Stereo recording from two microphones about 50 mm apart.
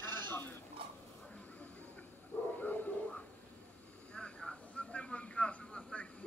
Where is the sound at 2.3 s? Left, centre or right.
Left.